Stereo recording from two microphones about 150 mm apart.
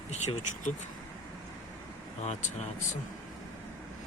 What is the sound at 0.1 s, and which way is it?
Speech, 50° left (ahead or behind).